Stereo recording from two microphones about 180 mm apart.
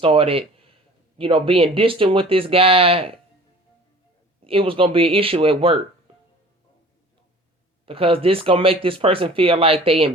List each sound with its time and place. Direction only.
0.0 s speech: 30° right (ahead or behind)
4.4 s speech: 30° right (ahead or behind)
7.9 s speech: 30° right (ahead or behind)